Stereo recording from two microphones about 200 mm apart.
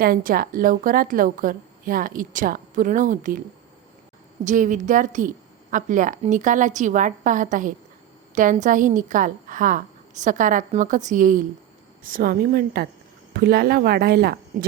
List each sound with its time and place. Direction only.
0.0 s a woman's voice: 45° right (ahead or behind)
4.4 s a woman's voice: 40° right (ahead or behind)